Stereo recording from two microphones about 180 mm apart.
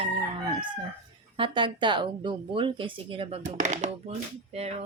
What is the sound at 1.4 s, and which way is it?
Speech, 25° right (ahead or behind).